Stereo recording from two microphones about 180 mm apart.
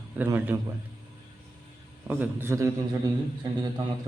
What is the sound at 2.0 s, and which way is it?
Speech, 10° right (ahead or behind).